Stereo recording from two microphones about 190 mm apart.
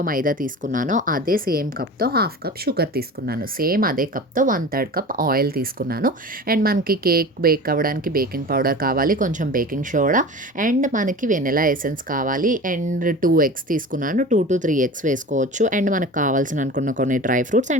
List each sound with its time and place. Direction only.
0.0 s a woman's voice: 45° right (ahead or behind)